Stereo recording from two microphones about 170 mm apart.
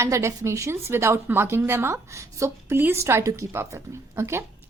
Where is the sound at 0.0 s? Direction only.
15° right (ahead or behind).